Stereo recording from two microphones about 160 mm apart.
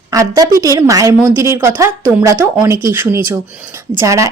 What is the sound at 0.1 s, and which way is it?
A woman's voice, 20° right (ahead or behind).